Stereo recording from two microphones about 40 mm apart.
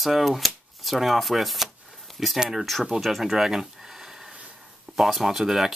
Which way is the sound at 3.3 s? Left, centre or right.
Centre.